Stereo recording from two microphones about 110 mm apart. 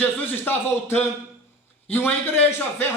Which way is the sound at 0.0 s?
20° left (ahead or behind).